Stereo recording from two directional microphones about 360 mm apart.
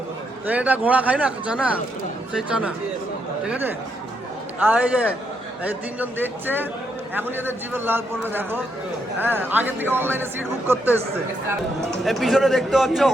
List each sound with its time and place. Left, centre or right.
0.4 s a man's voice: centre
11.4 s a man's voice: centre